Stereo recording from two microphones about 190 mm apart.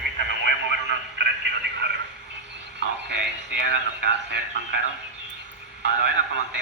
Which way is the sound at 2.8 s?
65° right (ahead or behind).